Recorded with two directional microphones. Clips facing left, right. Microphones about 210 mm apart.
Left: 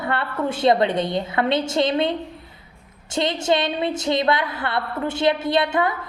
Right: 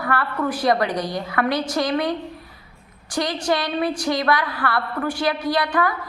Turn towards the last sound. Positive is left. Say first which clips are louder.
# left 1 dB
turn(degrees=25)  # may be behind; listen again after turning